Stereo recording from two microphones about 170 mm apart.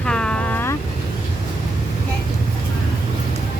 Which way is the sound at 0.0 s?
5° left (ahead or behind).